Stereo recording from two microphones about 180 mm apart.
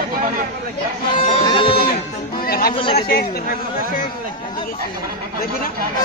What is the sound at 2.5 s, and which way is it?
Chatter, 55° left (ahead or behind).